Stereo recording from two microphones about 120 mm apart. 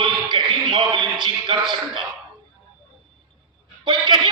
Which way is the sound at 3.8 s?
40° right (ahead or behind).